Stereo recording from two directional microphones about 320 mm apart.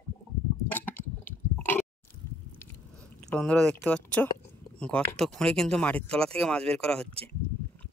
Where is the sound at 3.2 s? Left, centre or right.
Centre.